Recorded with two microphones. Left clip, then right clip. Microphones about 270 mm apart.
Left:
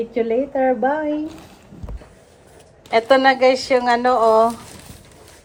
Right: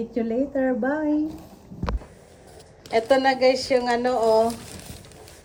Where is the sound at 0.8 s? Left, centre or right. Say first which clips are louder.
Left 4 dB; left.